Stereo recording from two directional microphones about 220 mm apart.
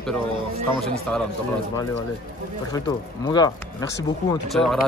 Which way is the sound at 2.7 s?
15° left (ahead or behind).